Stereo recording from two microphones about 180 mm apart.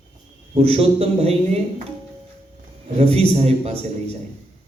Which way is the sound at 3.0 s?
35° right (ahead or behind).